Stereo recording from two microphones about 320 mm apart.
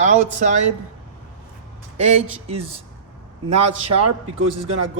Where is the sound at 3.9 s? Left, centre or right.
Right.